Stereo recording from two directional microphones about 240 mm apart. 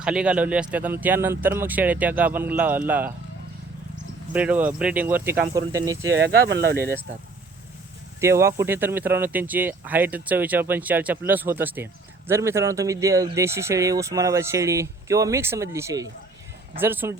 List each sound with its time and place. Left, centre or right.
0.0 s a man's voice: centre
4.3 s speech: centre
6.1 s speech: right
6.7 s speech: centre
8.2 s speech: centre